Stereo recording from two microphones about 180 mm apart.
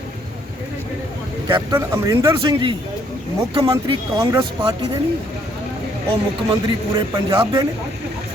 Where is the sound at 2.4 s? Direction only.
30° right (ahead or behind).